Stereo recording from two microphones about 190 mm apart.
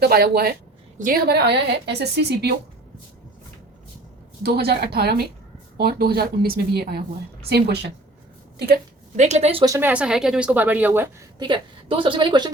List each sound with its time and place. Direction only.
0.0 s a woman's voice: 55° right (ahead or behind)
4.4 s a woman's voice: 60° right (ahead or behind)
9.1 s a woman's voice: 35° right (ahead or behind)
9.6 s a woman's voice: 10° right (ahead or behind)
11.3 s a woman's voice: 25° right (ahead or behind)